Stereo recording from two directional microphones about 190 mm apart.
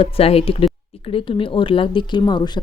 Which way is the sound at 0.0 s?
30° left (ahead or behind).